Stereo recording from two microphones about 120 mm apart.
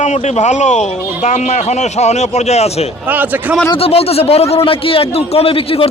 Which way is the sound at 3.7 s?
55° left (ahead or behind).